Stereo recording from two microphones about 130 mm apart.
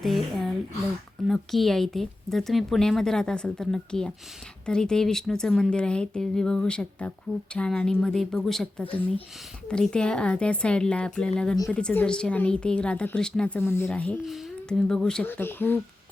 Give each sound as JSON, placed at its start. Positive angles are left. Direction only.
{"t": 0.0, "sound": "speech", "side_deg": 0}
{"t": 14.3, "sound": "speech", "side_deg": 0}
{"t": 15.3, "sound": "speech", "side_deg": 15}